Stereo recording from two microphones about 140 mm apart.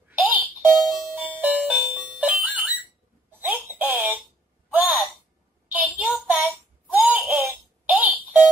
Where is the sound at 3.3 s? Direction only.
10° right (ahead or behind).